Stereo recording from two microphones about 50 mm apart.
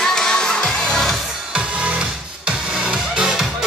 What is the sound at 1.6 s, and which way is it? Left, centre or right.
Music, right.